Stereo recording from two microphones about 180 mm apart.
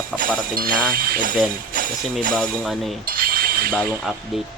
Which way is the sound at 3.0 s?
55° right (ahead or behind).